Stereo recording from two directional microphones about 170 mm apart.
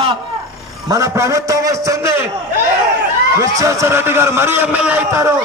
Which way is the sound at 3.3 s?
15° right (ahead or behind).